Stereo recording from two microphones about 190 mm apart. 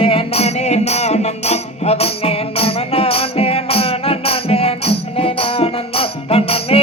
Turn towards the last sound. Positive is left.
turn(degrees=30)  # may be behind; listen again after turning